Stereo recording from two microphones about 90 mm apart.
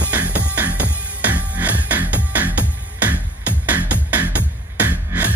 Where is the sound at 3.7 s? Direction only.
15° right (ahead or behind).